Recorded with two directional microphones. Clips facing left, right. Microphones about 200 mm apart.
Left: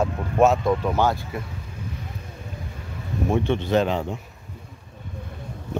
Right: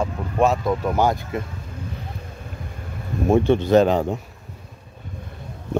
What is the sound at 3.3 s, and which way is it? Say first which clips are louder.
Speech: right 6 dB; 40° right (ahead or behind).